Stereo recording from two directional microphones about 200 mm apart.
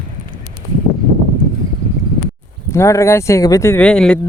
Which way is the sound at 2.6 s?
15° left (ahead or behind).